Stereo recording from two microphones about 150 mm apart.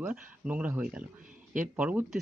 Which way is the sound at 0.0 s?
10° right (ahead or behind).